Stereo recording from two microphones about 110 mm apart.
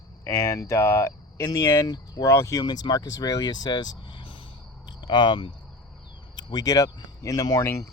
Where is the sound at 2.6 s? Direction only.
40° left (ahead or behind).